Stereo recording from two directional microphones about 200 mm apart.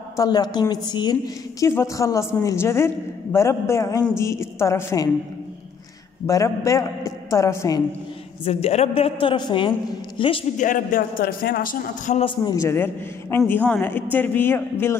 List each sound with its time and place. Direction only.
0.1 s a woman's voice: 20° left (ahead or behind)
6.2 s a woman's voice: 15° left (ahead or behind)
8.5 s a woman's voice: 30° left (ahead or behind)
10.6 s a man's voice: 40° left (ahead or behind)
12.2 s a woman's voice: 25° left (ahead or behind)